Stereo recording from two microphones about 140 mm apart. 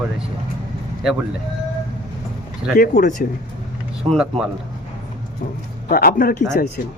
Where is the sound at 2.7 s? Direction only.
75° left (ahead or behind).